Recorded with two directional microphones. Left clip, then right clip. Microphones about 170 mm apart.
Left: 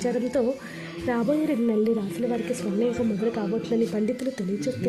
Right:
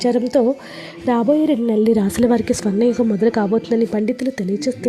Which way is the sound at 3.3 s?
35° right (ahead or behind).